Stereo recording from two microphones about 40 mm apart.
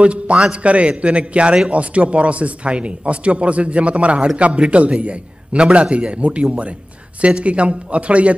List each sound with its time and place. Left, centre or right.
0.0 s speech: right